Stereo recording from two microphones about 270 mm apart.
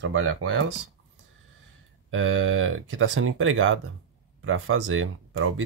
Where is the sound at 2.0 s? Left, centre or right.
Right.